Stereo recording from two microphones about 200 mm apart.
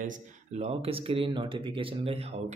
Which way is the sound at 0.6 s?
30° right (ahead or behind).